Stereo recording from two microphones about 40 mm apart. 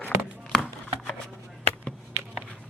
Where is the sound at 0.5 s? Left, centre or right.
Left.